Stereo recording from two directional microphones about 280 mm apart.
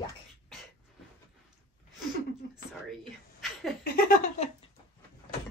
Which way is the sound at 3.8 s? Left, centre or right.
Left.